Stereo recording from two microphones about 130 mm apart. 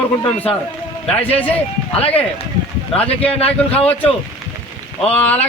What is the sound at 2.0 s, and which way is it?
Speech, 50° left (ahead or behind).